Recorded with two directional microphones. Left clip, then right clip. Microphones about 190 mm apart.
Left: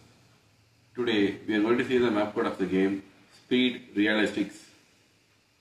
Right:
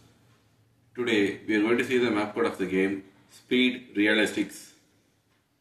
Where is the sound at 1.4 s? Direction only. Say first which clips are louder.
Right 1 dB; 25° left (ahead or behind).